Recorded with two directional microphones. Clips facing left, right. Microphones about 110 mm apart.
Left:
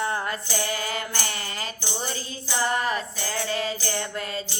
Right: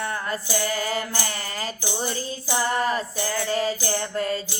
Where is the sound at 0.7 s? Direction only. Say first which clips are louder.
Right 3 dB; 35° right (ahead or behind).